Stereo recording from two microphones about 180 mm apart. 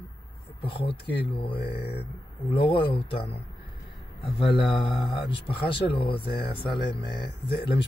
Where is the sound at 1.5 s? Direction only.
60° left (ahead or behind).